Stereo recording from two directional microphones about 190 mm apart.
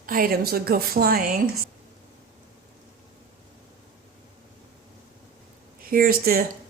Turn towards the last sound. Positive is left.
turn(degrees=-50)  # may be behind; listen again after turning